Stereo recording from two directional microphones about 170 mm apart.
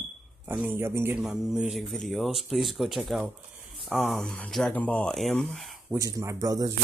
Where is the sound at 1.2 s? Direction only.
Centre (ahead or behind).